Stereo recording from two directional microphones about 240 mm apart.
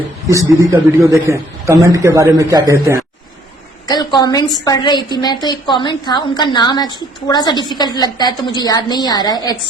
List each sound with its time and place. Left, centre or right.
0.3 s a man's voice: centre
3.8 s a woman's voice: centre